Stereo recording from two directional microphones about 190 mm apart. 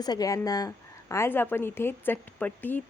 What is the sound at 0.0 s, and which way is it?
Speech, 20° left (ahead or behind).